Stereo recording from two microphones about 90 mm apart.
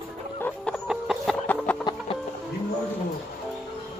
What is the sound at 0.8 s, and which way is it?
Chicken, 5° right (ahead or behind).